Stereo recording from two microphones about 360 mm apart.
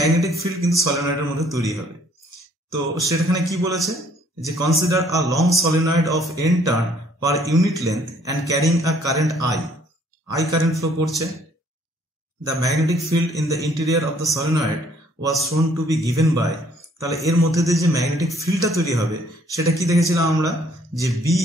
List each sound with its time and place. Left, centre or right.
0.0 s a man's voice: centre
3.0 s a man's voice: centre
12.4 s a man's voice: centre